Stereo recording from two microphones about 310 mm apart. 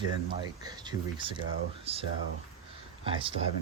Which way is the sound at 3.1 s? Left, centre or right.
Centre.